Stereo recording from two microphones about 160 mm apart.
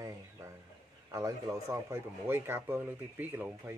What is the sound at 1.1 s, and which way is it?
Speech, 20° right (ahead or behind).